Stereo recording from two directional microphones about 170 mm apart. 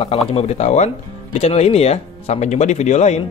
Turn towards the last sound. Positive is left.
turn(degrees=40)  # may be behind; listen again after turning